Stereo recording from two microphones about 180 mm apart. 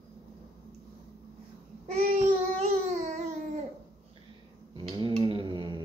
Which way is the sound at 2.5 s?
40° right (ahead or behind).